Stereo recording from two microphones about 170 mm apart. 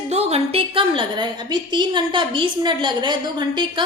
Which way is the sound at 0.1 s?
40° right (ahead or behind).